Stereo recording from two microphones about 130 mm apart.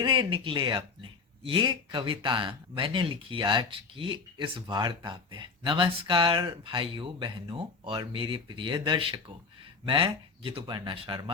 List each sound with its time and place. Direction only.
0.0 s speech: 40° right (ahead or behind)